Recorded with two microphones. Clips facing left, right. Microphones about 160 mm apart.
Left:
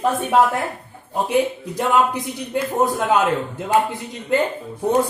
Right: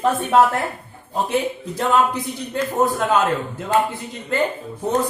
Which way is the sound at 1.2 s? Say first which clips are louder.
Left 3 dB; 15° left (ahead or behind).